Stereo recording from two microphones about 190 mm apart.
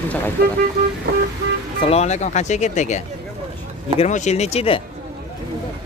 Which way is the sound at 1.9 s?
35° left (ahead or behind).